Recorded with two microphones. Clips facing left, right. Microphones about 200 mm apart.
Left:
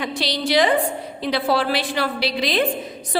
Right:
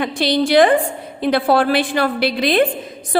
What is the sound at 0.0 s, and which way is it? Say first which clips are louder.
A woman's voice: right 7 dB; 55° right (ahead or behind).